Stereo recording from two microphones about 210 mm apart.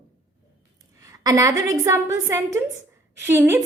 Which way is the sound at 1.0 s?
15° right (ahead or behind).